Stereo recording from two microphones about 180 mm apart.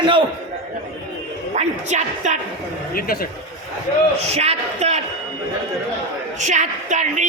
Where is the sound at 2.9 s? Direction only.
55° left (ahead or behind).